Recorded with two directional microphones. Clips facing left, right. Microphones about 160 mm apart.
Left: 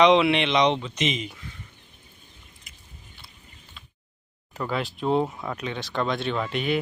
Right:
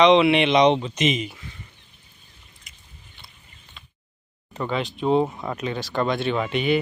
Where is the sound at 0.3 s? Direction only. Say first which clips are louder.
Right 5 dB; 15° right (ahead or behind).